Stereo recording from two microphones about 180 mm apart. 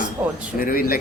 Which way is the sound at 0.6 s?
55° left (ahead or behind).